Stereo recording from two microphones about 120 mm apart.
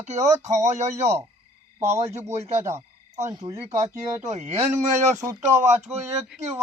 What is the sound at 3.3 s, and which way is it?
Speech, 30° right (ahead or behind).